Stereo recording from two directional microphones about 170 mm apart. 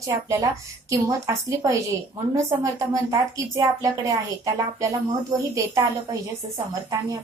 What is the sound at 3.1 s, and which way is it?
A woman's voice, 20° right (ahead or behind).